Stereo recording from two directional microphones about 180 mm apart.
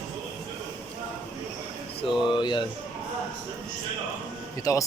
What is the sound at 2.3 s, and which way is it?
Speech, 25° left (ahead or behind).